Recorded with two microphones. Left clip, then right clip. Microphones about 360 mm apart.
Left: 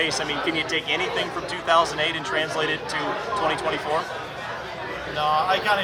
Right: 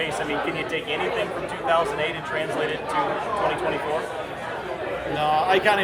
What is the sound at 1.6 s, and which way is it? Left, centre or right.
Speech, left.